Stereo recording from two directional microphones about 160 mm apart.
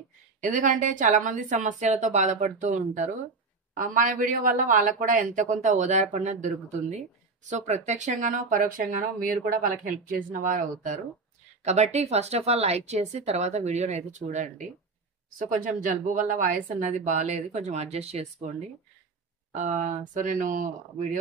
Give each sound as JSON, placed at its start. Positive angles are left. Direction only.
{"t": 0.4, "sound": "speech", "side_deg": -55}
{"t": 19.5, "sound": "speech", "side_deg": -50}